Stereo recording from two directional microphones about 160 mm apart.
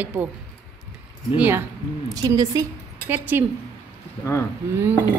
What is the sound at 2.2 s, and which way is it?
Speech, 25° right (ahead or behind).